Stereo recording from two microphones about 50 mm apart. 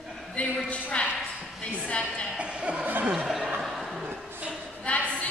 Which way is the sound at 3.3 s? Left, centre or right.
Centre.